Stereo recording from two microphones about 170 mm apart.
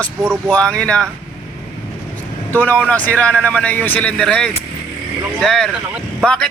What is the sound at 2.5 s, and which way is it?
A man's voice, 10° left (ahead or behind).